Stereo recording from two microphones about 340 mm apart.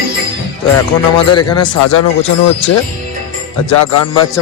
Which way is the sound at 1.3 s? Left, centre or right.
Centre.